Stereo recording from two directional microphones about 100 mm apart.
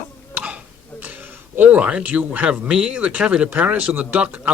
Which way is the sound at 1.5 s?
15° right (ahead or behind).